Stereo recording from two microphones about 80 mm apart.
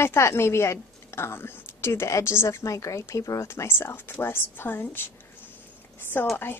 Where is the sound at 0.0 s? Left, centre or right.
Left.